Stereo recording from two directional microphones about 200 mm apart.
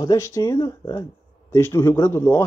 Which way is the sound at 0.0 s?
15° left (ahead or behind).